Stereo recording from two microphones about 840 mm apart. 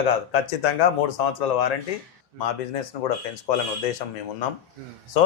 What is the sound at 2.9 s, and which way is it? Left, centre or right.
Speech, left.